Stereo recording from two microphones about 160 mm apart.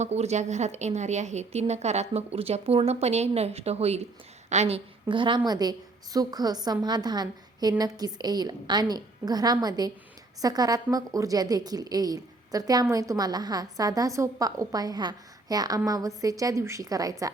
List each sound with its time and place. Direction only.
0.0 s a woman's voice: 45° right (ahead or behind); by 17.3 s 20° right (ahead or behind)